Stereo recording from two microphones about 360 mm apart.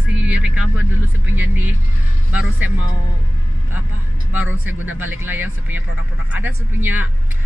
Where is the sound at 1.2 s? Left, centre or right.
Centre.